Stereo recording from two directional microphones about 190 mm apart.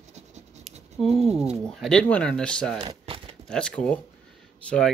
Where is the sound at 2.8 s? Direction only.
25° right (ahead or behind).